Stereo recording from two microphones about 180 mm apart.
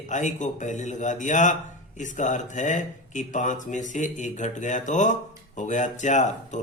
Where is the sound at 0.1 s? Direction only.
45° left (ahead or behind).